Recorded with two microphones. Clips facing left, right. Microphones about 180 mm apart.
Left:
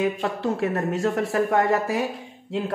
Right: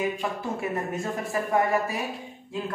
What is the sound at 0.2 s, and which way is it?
Speech, 90° left.